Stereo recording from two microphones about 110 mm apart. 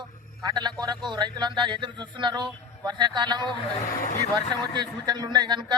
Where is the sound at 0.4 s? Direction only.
35° right (ahead or behind).